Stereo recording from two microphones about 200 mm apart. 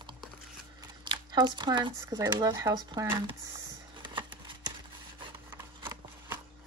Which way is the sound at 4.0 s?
25° right (ahead or behind).